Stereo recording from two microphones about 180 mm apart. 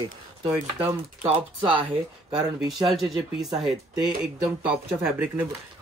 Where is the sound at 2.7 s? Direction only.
Centre (ahead or behind).